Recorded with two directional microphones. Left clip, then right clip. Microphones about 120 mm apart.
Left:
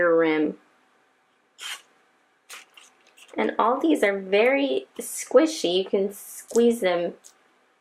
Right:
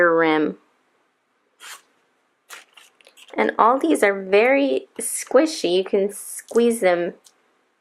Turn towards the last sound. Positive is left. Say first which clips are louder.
# right 3 dB
turn(degrees=-45)  # may be behind; listen again after turning